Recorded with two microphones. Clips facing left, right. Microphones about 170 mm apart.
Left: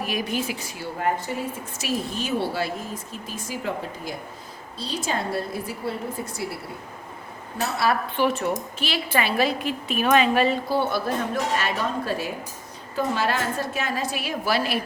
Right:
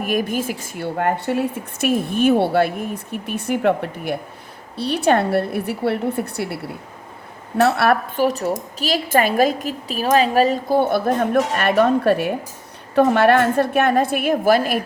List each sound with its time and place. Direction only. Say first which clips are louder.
0.0 s speech: right 6 dB; 50° right (ahead or behind); by 6.6 s 65° right (ahead or behind)
7.6 s speech: right 8 dB; 65° right (ahead or behind)
8.1 s a woman's voice: right 4 dB; 40° right (ahead or behind)